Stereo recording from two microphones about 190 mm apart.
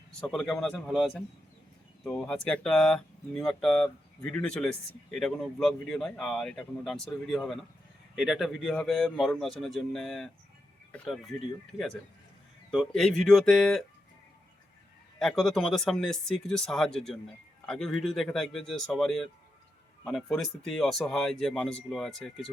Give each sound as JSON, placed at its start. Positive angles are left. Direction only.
{"t": 0.2, "sound": "speech", "side_deg": 0}
{"t": 12.7, "sound": "speech", "side_deg": 0}
{"t": 15.2, "sound": "speech", "side_deg": 0}
{"t": 20.3, "sound": "speech", "side_deg": 0}